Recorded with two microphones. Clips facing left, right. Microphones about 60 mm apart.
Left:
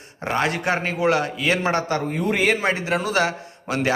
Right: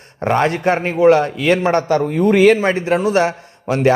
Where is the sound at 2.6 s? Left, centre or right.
Right.